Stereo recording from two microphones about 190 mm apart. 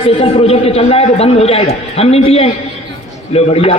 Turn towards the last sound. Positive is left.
turn(degrees=30)  # may be behind; listen again after turning